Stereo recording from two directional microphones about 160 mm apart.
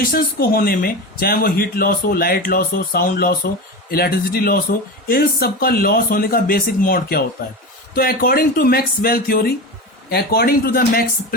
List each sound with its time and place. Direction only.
0.0 s speech: 65° left (ahead or behind)